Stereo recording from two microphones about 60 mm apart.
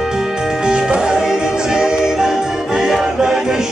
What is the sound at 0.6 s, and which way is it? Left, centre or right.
Music, centre.